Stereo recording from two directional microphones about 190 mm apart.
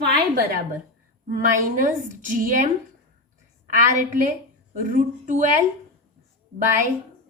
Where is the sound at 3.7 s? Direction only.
40° right (ahead or behind).